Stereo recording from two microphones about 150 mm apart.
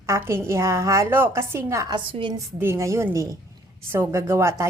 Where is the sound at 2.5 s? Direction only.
20° right (ahead or behind).